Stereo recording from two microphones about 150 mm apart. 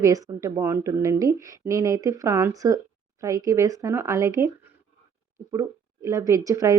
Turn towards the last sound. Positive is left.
turn(degrees=-20)  # may be behind; listen again after turning